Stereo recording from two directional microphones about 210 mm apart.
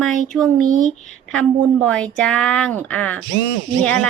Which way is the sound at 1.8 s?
5° left (ahead or behind).